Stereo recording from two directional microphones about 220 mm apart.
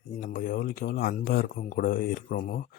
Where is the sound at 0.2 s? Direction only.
40° left (ahead or behind).